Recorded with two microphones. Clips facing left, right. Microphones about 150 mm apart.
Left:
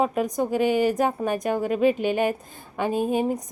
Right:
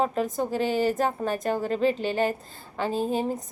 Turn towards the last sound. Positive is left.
turn(degrees=15)  # may be behind; listen again after turning